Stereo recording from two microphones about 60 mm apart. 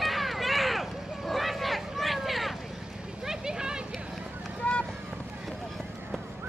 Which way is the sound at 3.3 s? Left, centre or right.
Centre.